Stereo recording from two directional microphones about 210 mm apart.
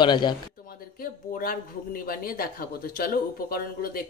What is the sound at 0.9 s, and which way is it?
Speech, 45° left (ahead or behind).